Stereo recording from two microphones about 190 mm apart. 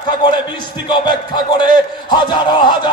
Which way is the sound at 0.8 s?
25° left (ahead or behind).